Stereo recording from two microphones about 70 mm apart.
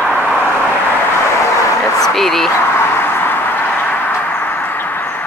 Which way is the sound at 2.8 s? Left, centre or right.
Left.